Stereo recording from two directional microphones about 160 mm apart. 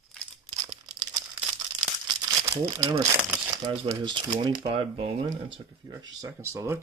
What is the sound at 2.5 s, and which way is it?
Speech, 20° right (ahead or behind).